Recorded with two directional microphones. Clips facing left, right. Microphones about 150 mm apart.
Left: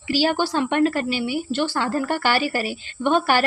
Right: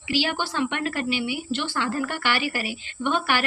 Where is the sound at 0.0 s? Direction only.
40° left (ahead or behind).